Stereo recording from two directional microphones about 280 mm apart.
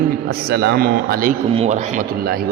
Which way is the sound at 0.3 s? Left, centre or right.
Right.